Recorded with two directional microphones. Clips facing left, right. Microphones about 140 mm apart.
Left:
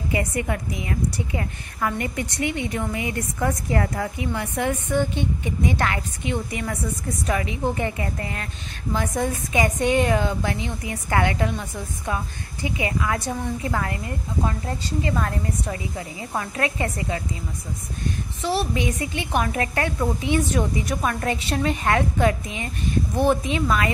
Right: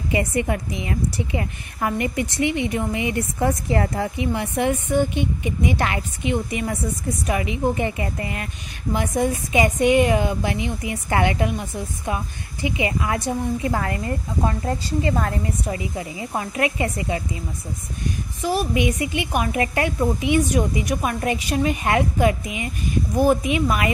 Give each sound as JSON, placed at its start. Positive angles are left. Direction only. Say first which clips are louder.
{"t": 0.1, "sound": "a woman's voice", "louder": "right 4 dB", "side_deg": -20}
{"t": 15.0, "sound": "a woman's voice", "louder": "right 2 dB", "side_deg": -30}
{"t": 15.6, "sound": "a woman's voice", "louder": "right 3 dB", "side_deg": -20}
{"t": 18.6, "sound": "a woman's voice", "louder": "right 3 dB", "side_deg": -15}